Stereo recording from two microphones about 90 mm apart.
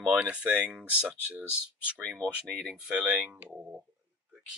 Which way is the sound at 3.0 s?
10° right (ahead or behind).